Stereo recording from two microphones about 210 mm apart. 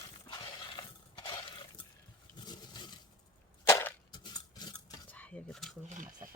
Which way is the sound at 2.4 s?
20° left (ahead or behind).